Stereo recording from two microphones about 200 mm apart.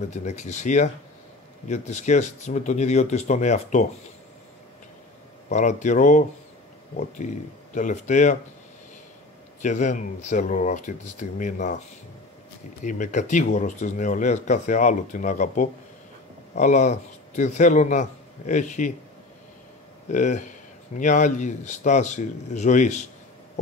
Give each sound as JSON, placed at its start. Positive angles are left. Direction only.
{"t": 0.1, "sound": "speech", "side_deg": 35}
{"t": 5.5, "sound": "speech", "side_deg": 35}
{"t": 9.6, "sound": "speech", "side_deg": 35}
{"t": 12.8, "sound": "speech", "side_deg": 40}
{"t": 20.1, "sound": "speech", "side_deg": 40}